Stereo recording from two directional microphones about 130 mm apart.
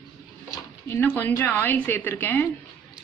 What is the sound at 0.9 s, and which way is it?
A woman's voice, 15° left (ahead or behind).